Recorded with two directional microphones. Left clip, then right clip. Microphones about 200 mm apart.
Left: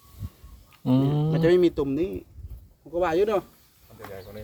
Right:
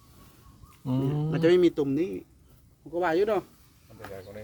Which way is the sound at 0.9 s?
20° left (ahead or behind).